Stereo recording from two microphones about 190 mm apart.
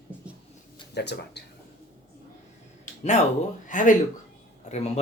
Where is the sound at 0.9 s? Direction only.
60° left (ahead or behind).